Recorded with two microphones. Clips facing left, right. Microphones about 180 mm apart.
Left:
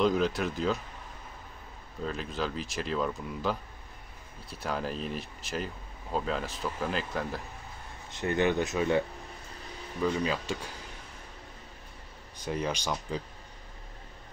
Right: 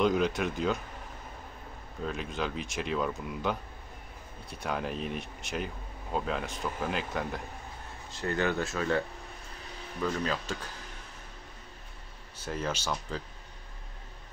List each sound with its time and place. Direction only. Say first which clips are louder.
0.0 s speech: even; centre (ahead or behind)
2.0 s speech: even; centre (ahead or behind)
8.1 s speech: left 3 dB; 20° left (ahead or behind)
10.0 s speech: left 2 dB; 10° left (ahead or behind)
12.4 s speech: left 2 dB; 15° left (ahead or behind)